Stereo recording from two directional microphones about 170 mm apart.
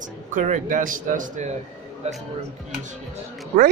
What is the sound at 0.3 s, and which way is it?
A man's voice, 50° right (ahead or behind).